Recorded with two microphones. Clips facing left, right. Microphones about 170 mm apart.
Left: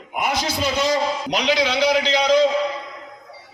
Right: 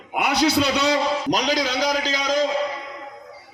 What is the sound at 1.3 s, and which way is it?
A man's voice, 45° right (ahead or behind).